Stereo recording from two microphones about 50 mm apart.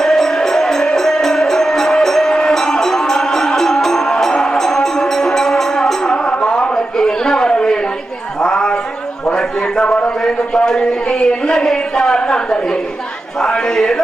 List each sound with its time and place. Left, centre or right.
0.0 s music: centre
6.2 s a sound: centre
9.3 s a man's voice: centre